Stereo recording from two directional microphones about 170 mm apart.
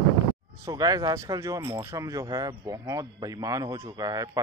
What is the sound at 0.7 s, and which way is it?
Speech, 20° right (ahead or behind).